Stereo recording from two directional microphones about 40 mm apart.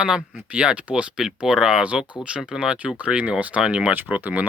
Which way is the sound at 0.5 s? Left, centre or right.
Right.